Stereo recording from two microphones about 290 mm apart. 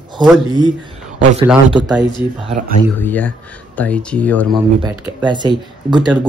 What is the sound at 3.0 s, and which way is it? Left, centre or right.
Speech, centre.